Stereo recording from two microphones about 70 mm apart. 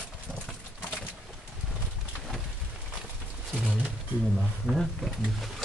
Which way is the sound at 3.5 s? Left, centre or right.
Centre.